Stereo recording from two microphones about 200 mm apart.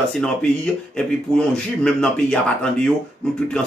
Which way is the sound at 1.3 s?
5° left (ahead or behind).